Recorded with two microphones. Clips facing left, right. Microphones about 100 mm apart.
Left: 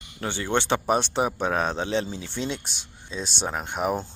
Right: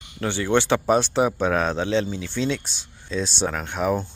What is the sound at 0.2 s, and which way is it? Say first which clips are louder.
Speech: right 5 dB; 20° left (ahead or behind).